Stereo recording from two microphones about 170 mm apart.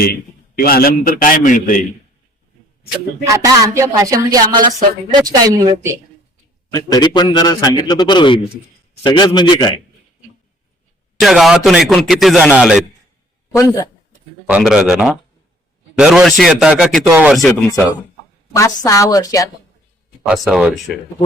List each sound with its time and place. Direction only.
0.0 s a man's voice: 65° left (ahead or behind)
3.2 s speech: 20° right (ahead or behind)
6.7 s a man's voice: 25° left (ahead or behind)
11.2 s a man's voice: centre (ahead or behind)
13.5 s a man's voice: 20° left (ahead or behind)
14.4 s a man's voice: 5° right (ahead or behind)
18.8 s a man's voice: 20° left (ahead or behind)
20.2 s a man's voice: centre (ahead or behind)